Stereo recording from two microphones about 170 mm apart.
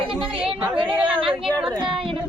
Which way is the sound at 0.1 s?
30° right (ahead or behind).